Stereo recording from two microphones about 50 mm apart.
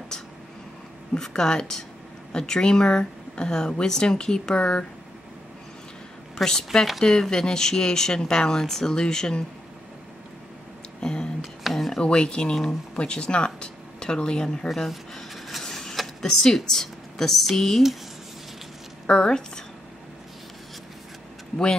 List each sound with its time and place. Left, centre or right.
1.1 s speech: centre
6.3 s speech: centre
11.0 s a sound: centre
12.0 s speech: centre
14.8 s a sound: centre
15.6 s speech: centre
19.0 s speech: centre